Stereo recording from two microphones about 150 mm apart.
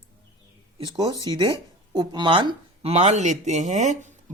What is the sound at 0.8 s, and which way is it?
Speech, 30° right (ahead or behind).